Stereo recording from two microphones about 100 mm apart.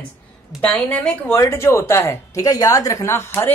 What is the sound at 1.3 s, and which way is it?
A woman's voice, 30° left (ahead or behind).